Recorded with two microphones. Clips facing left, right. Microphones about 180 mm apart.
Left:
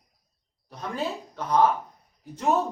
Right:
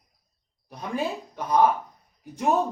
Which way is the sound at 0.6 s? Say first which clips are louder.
Right 2 dB; 15° right (ahead or behind).